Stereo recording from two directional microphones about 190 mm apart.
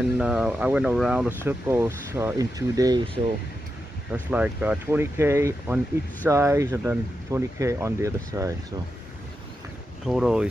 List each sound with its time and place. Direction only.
0.2 s speech: 5° right (ahead or behind)
4.1 s speech: 5° right (ahead or behind)
10.0 s speech: 5° right (ahead or behind)